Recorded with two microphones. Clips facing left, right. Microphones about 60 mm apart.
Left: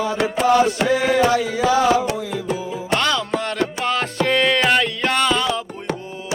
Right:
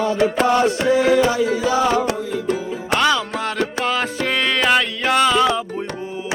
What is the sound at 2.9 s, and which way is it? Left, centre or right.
Music, centre.